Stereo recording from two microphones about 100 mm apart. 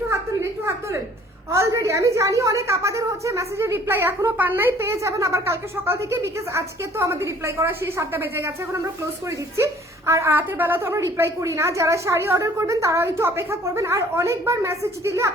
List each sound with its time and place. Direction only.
0.1 s a sound: 25° right (ahead or behind)
1.5 s a woman's voice: 30° right (ahead or behind)
10.1 s a woman's voice: 25° right (ahead or behind)